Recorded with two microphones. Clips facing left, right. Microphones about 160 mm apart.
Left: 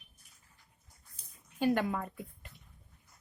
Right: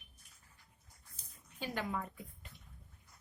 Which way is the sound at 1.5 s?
55° left (ahead or behind).